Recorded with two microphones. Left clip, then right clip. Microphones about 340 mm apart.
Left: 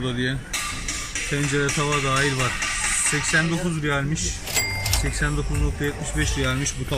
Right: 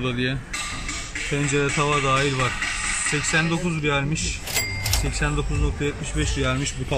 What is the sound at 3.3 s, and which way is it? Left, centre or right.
Speech, centre.